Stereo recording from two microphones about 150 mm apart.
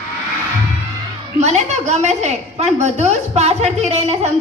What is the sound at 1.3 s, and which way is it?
A woman's voice, 50° right (ahead or behind).